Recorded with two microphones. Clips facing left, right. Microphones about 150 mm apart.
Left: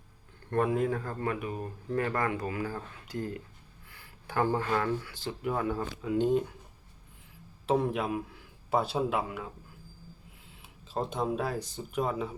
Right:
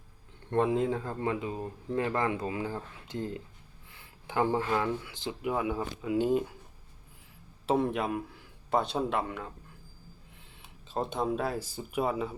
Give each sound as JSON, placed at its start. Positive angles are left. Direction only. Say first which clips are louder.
{"t": 0.5, "sound": "speech", "louder": "right 1 dB", "side_deg": -20}
{"t": 7.7, "sound": "speech", "louder": "even", "side_deg": 0}
{"t": 10.6, "sound": "speech", "louder": "even", "side_deg": 0}